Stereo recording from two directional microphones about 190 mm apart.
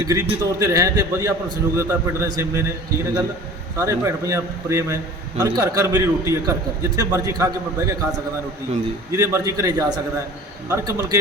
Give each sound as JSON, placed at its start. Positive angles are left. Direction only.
{"t": 0.0, "sound": "a man's voice", "side_deg": -15}
{"t": 3.8, "sound": "a man's voice", "side_deg": -15}
{"t": 9.1, "sound": "a man's voice", "side_deg": -15}